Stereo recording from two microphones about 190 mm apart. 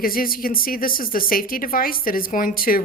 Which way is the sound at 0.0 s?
50° left (ahead or behind).